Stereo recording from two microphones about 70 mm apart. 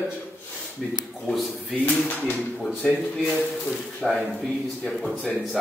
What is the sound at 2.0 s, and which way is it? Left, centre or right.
A man's voice, left.